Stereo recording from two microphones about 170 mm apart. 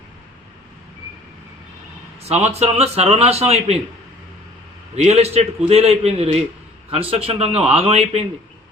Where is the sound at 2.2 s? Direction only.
40° right (ahead or behind).